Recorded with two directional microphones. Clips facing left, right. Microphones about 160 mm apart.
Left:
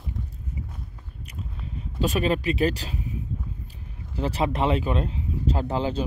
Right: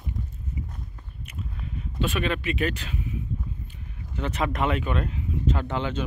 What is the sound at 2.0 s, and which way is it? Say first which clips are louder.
Speech: left 3 dB; 35° left (ahead or behind).